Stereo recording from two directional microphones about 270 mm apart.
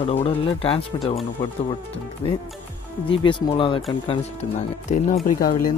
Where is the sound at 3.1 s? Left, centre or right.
Centre.